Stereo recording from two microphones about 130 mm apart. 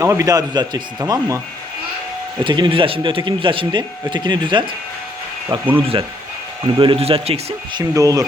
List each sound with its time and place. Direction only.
0.0 s speech: 25° right (ahead or behind)
2.4 s a man's voice: 40° right (ahead or behind)
6.7 s speech: 45° right (ahead or behind)
7.7 s speech: 30° right (ahead or behind)